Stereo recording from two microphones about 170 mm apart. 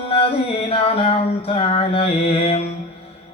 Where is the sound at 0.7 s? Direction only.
35° left (ahead or behind).